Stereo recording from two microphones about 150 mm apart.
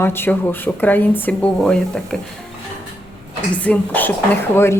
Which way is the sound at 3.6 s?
10° left (ahead or behind).